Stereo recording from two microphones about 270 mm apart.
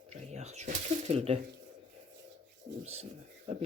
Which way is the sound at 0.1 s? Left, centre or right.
Right.